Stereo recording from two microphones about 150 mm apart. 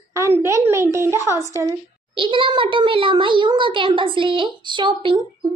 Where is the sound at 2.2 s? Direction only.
35° right (ahead or behind).